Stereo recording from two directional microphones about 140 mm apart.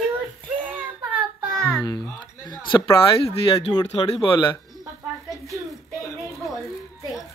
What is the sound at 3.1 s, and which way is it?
Speech, 45° left (ahead or behind).